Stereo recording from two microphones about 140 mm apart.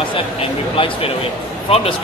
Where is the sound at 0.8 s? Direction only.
40° left (ahead or behind).